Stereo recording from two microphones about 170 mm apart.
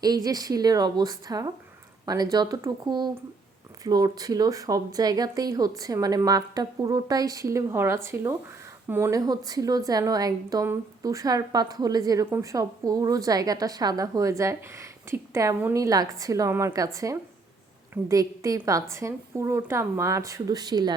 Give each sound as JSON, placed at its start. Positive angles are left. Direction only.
{"t": 0.0, "sound": "a woman's voice", "side_deg": -20}